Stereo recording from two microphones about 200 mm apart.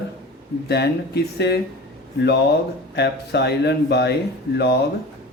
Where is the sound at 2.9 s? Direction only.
55° left (ahead or behind).